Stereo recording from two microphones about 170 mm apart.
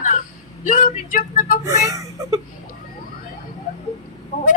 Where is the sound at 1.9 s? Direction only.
20° right (ahead or behind).